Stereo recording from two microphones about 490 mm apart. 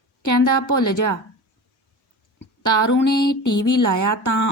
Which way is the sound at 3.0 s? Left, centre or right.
Left.